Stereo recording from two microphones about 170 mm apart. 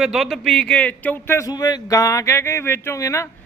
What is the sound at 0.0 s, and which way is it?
Speech, centre (ahead or behind).